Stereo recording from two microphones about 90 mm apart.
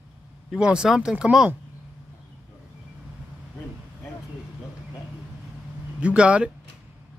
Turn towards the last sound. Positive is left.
turn(degrees=-10)  # may be behind; listen again after turning